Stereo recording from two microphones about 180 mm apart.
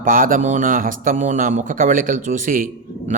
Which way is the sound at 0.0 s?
50° right (ahead or behind).